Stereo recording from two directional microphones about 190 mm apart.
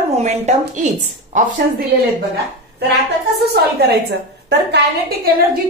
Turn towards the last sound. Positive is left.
turn(degrees=-55)  # may be behind; listen again after turning